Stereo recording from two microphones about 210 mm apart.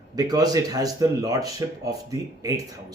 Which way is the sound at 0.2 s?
20° right (ahead or behind).